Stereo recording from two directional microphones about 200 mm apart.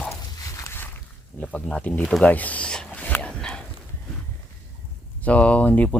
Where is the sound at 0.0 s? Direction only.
15° left (ahead or behind).